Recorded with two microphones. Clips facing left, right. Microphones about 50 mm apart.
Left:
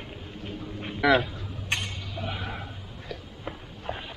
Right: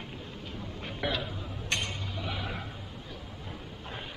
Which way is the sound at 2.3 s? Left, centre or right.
Centre.